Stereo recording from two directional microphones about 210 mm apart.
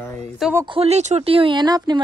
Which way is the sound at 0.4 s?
5° right (ahead or behind).